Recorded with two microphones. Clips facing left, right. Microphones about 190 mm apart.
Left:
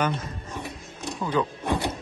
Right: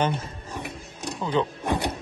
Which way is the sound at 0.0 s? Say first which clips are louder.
Right 1 dB; 30° right (ahead or behind).